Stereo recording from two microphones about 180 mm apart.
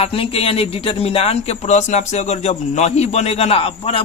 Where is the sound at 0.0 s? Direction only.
30° left (ahead or behind).